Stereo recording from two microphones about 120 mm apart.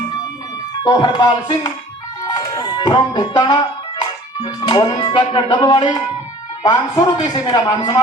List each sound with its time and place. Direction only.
0.9 s speech: 40° left (ahead or behind)